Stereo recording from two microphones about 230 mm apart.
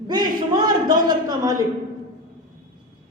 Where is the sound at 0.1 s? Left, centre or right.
Centre.